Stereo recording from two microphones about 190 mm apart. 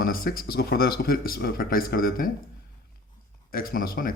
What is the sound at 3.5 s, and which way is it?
Speech, 50° left (ahead or behind).